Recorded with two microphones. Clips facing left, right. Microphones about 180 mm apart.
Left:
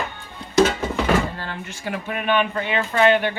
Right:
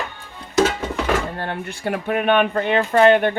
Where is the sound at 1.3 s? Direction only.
55° right (ahead or behind).